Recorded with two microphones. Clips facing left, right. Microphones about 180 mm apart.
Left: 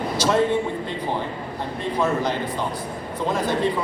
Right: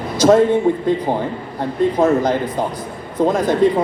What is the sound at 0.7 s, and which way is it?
Speech, 50° right (ahead or behind).